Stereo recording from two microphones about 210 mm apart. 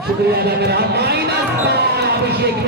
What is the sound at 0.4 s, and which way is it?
Speech, 50° right (ahead or behind).